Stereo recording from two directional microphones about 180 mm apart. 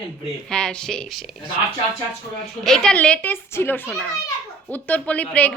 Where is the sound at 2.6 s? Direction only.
5° left (ahead or behind).